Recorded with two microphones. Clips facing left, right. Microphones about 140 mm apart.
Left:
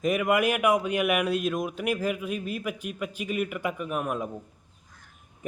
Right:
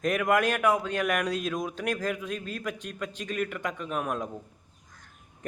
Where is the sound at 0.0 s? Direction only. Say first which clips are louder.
Left 1 dB; 5° left (ahead or behind).